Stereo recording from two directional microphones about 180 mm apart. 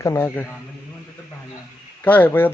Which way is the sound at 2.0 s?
10° left (ahead or behind).